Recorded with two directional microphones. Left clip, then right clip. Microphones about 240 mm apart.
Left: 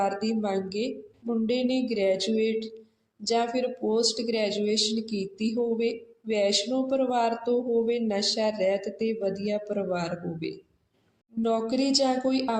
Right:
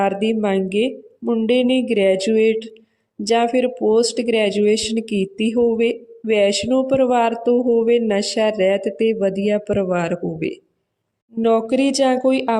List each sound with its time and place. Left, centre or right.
0.0 s speech: right
11.4 s speech: right